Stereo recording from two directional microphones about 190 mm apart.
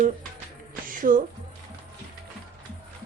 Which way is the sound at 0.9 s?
45° right (ahead or behind).